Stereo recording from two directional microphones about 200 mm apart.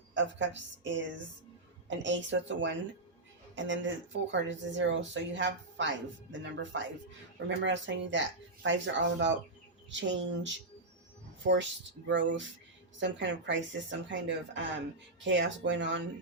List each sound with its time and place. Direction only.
0.1 s speech: 65° right (ahead or behind)